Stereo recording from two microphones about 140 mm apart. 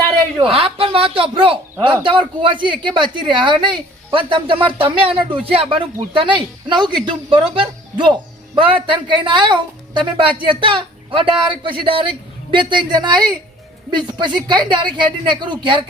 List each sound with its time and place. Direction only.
0.4 s a woman's voice: 45° right (ahead or behind)